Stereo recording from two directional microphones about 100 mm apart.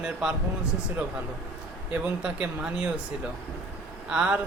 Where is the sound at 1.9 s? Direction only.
15° right (ahead or behind).